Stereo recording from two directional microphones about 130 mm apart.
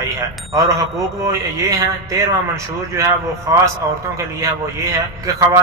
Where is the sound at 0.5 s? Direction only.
25° right (ahead or behind).